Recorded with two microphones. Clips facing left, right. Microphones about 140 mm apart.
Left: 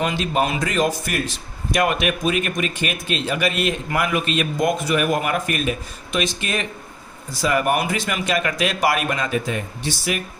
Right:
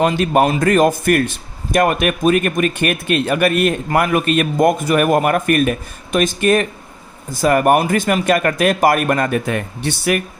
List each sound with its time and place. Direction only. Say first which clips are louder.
0.0 s a man's voice: right 7 dB; 50° right (ahead or behind)